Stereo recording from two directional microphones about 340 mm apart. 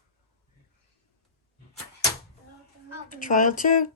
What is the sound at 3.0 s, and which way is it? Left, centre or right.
Speech, left.